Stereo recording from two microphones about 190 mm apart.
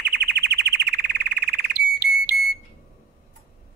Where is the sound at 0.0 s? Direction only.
60° right (ahead or behind).